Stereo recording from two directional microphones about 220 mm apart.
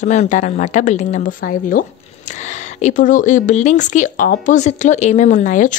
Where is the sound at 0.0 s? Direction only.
35° left (ahead or behind).